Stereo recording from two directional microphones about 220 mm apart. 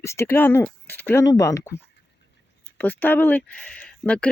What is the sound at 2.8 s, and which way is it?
Speech, 10° left (ahead or behind).